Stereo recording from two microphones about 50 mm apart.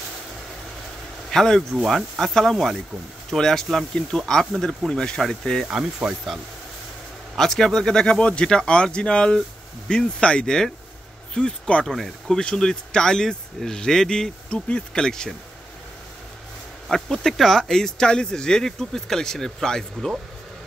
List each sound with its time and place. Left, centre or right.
1.3 s speech: centre
5.7 s speech: centre
7.3 s speech: centre
12.4 s speech: centre
16.9 s speech: centre